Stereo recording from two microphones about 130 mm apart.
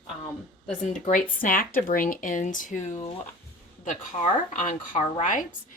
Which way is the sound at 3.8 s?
75° left (ahead or behind).